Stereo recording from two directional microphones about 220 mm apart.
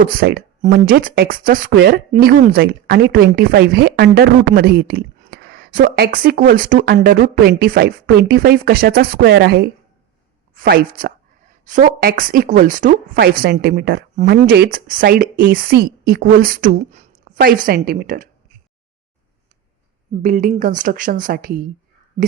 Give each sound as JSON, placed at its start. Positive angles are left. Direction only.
{"t": 0.0, "sound": "speech", "side_deg": -40}
{"t": 20.2, "sound": "speech", "side_deg": -35}